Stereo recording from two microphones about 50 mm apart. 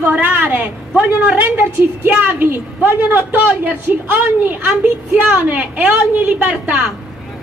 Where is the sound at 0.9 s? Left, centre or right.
Right.